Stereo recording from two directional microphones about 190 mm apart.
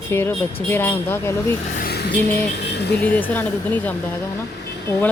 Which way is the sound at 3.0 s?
10° left (ahead or behind).